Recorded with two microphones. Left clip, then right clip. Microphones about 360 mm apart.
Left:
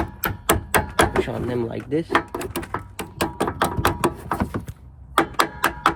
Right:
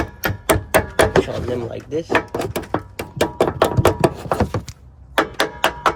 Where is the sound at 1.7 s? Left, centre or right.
Centre.